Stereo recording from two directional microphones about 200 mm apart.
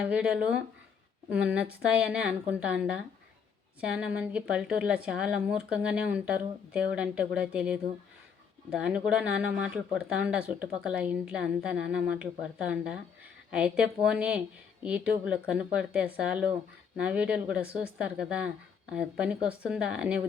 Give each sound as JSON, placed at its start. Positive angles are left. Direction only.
{"t": 0.0, "sound": "speech", "side_deg": -5}
{"t": 8.8, "sound": "speech", "side_deg": -5}